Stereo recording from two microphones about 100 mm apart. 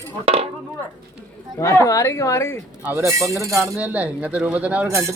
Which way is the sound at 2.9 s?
30° right (ahead or behind).